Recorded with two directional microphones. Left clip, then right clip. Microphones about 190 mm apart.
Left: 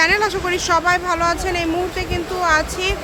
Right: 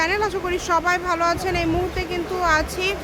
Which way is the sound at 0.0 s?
5° left (ahead or behind).